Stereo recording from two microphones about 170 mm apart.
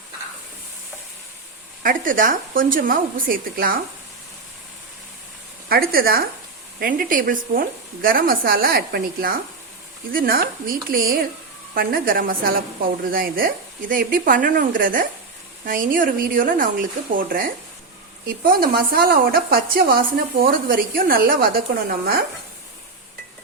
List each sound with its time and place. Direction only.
1.8 s speech: 55° right (ahead or behind)
5.6 s speech: 60° right (ahead or behind)